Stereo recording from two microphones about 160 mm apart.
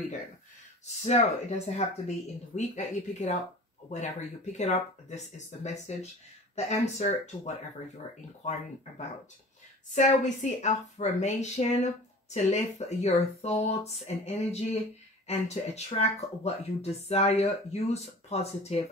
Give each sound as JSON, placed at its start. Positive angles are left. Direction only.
{"t": 0.8, "sound": "speech", "side_deg": 45}
{"t": 9.9, "sound": "speech", "side_deg": 45}